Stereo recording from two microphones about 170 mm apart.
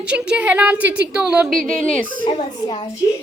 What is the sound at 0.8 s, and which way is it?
Speech, 90° right.